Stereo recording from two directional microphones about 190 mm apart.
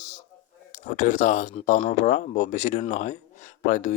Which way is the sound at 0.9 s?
40° left (ahead or behind).